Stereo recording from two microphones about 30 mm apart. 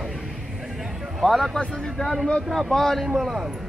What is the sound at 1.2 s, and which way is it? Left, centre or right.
Speech, centre.